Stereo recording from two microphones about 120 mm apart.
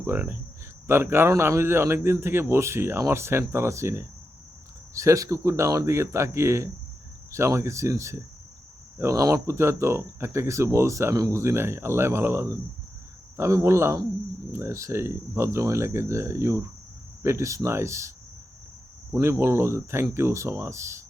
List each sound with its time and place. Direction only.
0.0 s speech: 20° right (ahead or behind)
19.1 s speech: 20° right (ahead or behind)